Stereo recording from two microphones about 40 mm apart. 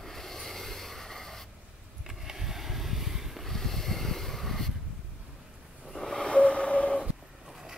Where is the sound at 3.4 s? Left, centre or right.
Centre.